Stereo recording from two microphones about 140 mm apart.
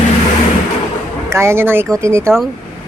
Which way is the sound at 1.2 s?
20° right (ahead or behind).